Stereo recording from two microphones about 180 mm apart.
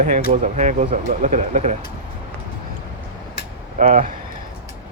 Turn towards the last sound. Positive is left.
turn(degrees=-40)  # may be behind; listen again after turning